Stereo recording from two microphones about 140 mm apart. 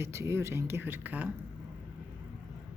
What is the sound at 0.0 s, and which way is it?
Speech, 20° right (ahead or behind).